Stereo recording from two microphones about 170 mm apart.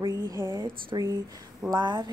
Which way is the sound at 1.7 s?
25° right (ahead or behind).